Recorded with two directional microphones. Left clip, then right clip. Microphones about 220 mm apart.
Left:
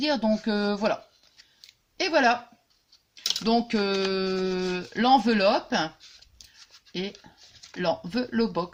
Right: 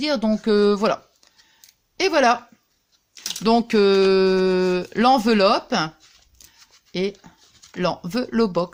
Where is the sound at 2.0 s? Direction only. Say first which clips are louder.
Right 5 dB; 45° right (ahead or behind).